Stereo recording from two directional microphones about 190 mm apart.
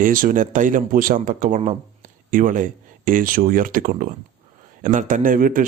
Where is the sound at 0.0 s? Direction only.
45° right (ahead or behind).